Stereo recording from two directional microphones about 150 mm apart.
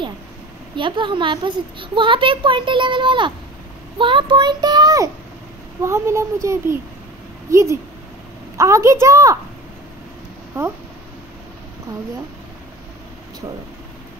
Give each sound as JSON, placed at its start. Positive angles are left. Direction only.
{"t": 0.7, "sound": "a child's voice", "side_deg": -30}
{"t": 8.5, "sound": "a child's voice", "side_deg": -20}
{"t": 10.6, "sound": "speech", "side_deg": -15}